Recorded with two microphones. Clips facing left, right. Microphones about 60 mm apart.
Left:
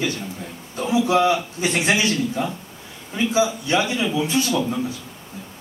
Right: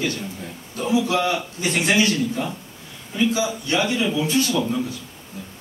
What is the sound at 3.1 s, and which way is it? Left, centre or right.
A man's voice, left.